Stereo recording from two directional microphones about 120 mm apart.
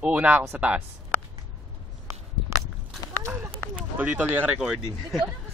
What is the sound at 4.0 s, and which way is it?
Speech, 15° right (ahead or behind).